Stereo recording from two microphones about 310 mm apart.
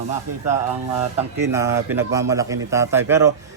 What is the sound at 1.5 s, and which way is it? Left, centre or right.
A man's voice, centre.